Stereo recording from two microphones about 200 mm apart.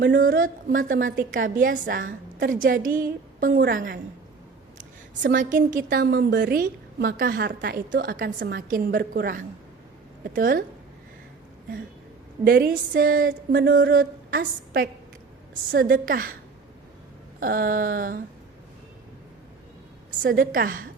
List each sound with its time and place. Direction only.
0.0 s a woman's voice: 50° right (ahead or behind)
12.5 s a woman's voice: 55° right (ahead or behind)
17.4 s a woman's voice: 45° right (ahead or behind)
20.2 s a woman's voice: 45° right (ahead or behind)